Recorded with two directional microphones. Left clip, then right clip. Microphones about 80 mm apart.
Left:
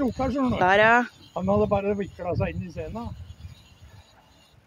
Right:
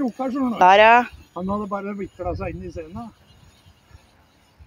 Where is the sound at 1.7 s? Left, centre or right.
Left.